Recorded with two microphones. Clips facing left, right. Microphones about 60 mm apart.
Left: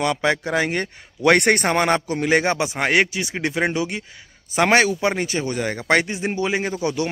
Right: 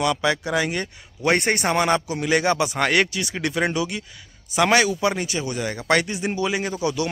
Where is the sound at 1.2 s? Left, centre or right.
Left.